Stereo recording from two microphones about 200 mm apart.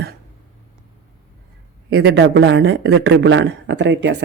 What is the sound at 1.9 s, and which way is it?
Speech, 55° right (ahead or behind).